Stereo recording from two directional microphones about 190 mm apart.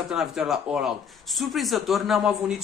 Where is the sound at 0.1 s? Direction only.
Centre (ahead or behind).